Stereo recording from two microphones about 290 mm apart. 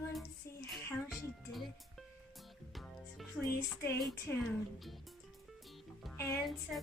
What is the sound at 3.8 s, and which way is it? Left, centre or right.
Speech, centre.